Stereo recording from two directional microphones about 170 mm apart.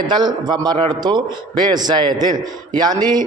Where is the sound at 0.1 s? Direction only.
25° right (ahead or behind).